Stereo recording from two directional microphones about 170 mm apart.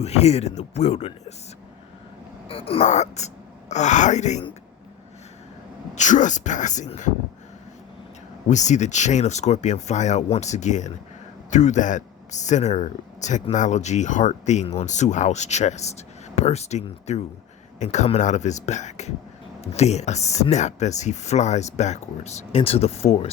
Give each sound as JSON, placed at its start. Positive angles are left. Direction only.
{"t": 0.0, "sound": "speech", "side_deg": 40}
{"t": 2.5, "sound": "speech", "side_deg": 35}
{"t": 5.9, "sound": "speech", "side_deg": 45}
{"t": 8.4, "sound": "speech", "side_deg": 45}